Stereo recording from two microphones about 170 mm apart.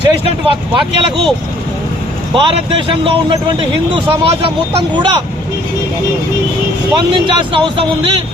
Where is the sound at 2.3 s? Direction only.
30° right (ahead or behind).